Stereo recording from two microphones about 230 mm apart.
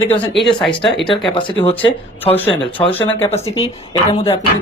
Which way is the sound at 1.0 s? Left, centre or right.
Left.